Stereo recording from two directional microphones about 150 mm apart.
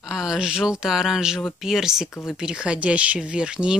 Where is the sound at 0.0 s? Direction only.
5° right (ahead or behind).